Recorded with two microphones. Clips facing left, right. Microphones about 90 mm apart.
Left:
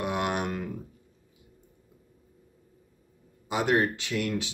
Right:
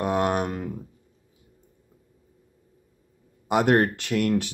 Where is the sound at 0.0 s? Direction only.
40° right (ahead or behind).